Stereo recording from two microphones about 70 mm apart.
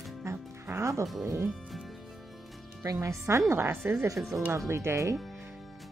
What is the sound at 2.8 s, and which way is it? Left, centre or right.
Speech, right.